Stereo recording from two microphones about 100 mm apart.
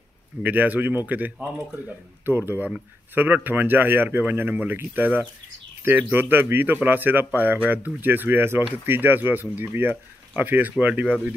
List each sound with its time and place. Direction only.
0.4 s a man's voice: 15° right (ahead or behind)